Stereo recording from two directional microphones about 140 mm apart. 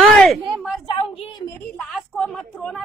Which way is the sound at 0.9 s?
35° left (ahead or behind).